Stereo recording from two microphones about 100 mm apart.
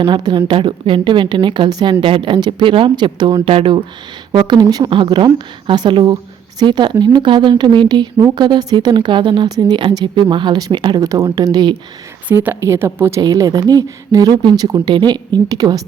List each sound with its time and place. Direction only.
0.0 s a woman's voice: 50° right (ahead or behind)
3.4 s a woman's voice: 65° right (ahead or behind); by 4.9 s 40° right (ahead or behind)
4.9 s a woman's voice: 55° right (ahead or behind)
11.0 s speech: 35° right (ahead or behind)
12.3 s speech: 20° right (ahead or behind)
13.2 s speech: 35° right (ahead or behind)